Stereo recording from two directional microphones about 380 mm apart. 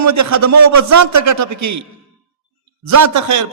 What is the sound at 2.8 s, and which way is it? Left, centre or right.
Speech, right.